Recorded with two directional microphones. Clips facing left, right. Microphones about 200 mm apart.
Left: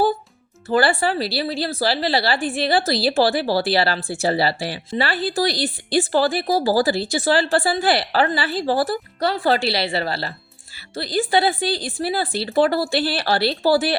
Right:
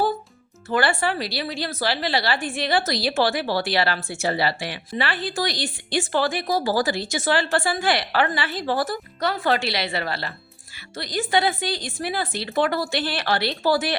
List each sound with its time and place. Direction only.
0.7 s a woman's voice: 35° left (ahead or behind)